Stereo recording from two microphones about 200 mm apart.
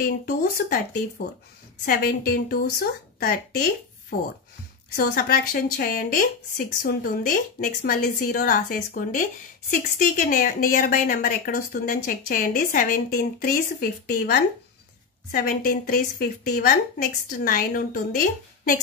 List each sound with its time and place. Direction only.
0.0 s speech: 45° left (ahead or behind)